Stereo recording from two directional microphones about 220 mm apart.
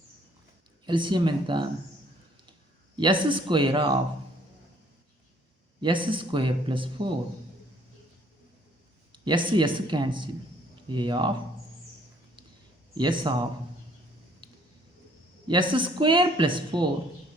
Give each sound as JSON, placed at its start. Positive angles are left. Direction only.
{"t": 0.9, "sound": "speech", "side_deg": -20}
{"t": 5.8, "sound": "speech", "side_deg": -20}
{"t": 9.2, "sound": "speech", "side_deg": -20}
{"t": 12.9, "sound": "a man's voice", "side_deg": -20}
{"t": 14.4, "sound": "squish", "side_deg": -20}
{"t": 15.4, "sound": "speech", "side_deg": -20}